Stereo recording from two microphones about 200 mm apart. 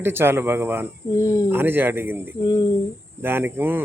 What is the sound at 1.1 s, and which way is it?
Speech, 15° left (ahead or behind).